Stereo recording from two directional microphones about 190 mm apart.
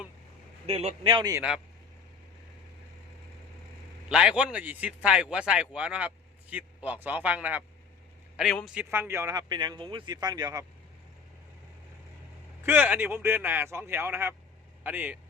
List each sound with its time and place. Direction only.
0.7 s speech: 35° right (ahead or behind)
1.4 s speech: 5° right (ahead or behind)
4.1 s speech: 5° right (ahead or behind)
12.6 s speech: 10° right (ahead or behind)